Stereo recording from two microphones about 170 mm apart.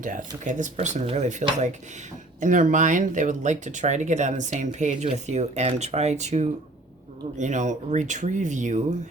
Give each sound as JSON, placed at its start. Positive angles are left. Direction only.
{"t": 0.0, "sound": "speech", "side_deg": -50}